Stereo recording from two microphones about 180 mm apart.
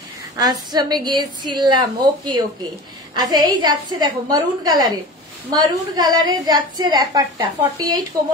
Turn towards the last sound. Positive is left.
turn(degrees=-20)  # may be behind; listen again after turning